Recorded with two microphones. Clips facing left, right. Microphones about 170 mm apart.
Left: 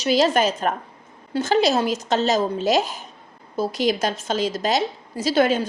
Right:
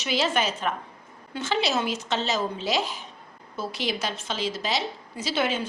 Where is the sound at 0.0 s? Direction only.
40° left (ahead or behind).